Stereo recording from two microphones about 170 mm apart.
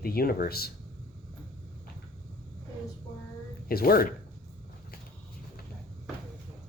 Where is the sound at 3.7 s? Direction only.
60° left (ahead or behind).